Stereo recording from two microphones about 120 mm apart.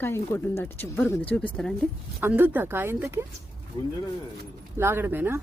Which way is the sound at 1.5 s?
5° left (ahead or behind).